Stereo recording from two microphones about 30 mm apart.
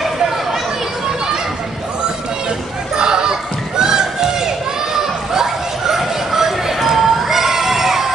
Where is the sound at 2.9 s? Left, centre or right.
Right.